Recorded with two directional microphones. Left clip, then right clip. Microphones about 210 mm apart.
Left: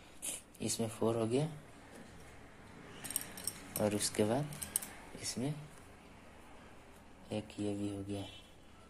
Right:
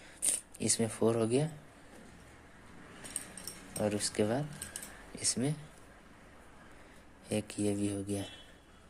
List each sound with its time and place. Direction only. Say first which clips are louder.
0.3 s speech: right 6 dB; 20° right (ahead or behind)
3.7 s speech: right 1 dB; 5° right (ahead or behind)
5.1 s speech: right 6 dB; 20° right (ahead or behind)
7.2 s speech: right 6 dB; 25° right (ahead or behind)